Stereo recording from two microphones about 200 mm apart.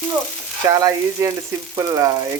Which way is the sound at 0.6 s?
15° right (ahead or behind).